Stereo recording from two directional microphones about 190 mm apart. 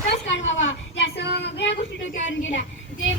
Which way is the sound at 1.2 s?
65° left (ahead or behind).